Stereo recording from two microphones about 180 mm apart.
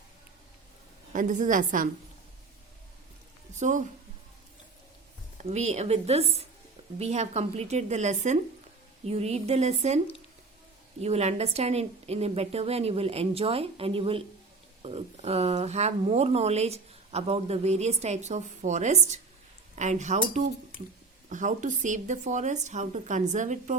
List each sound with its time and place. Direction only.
1.1 s speech: 45° right (ahead or behind)
3.5 s a woman's voice: 40° right (ahead or behind)
5.4 s speech: 40° right (ahead or behind)
11.0 s speech: 35° right (ahead or behind)